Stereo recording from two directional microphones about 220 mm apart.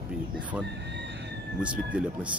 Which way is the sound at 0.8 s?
50° right (ahead or behind).